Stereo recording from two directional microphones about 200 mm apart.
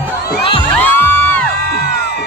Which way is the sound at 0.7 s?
5° left (ahead or behind).